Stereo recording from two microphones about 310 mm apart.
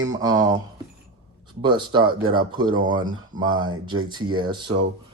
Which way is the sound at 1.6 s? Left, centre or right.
Centre.